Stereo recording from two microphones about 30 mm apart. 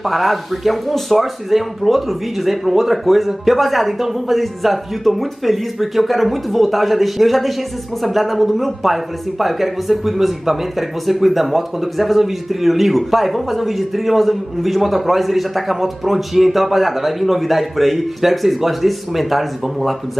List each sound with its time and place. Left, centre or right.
0.0 s speech: centre